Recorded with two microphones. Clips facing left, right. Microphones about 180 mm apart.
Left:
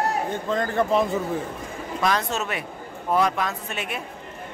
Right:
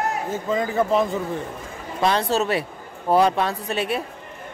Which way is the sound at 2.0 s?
30° right (ahead or behind).